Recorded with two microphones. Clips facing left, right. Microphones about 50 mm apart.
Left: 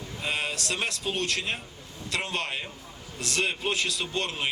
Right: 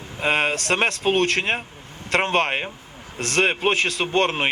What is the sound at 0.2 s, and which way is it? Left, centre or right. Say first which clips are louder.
A man's voice: right 10 dB; right.